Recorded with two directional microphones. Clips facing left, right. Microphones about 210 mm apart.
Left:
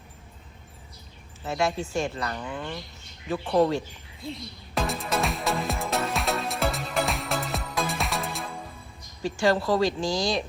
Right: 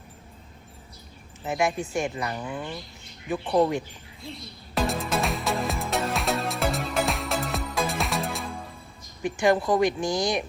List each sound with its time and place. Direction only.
1.5 s speech: 15° right (ahead or behind)
4.7 s music: centre (ahead or behind)
9.2 s speech: 20° right (ahead or behind)